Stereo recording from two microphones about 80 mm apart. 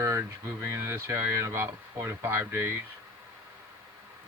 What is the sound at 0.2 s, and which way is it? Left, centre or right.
Speech, right.